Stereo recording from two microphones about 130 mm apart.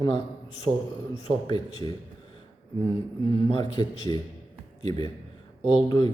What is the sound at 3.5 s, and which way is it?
Speech, 35° left (ahead or behind).